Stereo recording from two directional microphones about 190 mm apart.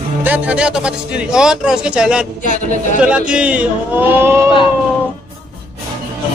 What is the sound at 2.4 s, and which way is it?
Speech, 40° left (ahead or behind).